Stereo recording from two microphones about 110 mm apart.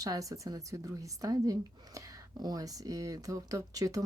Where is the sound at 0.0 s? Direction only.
30° right (ahead or behind).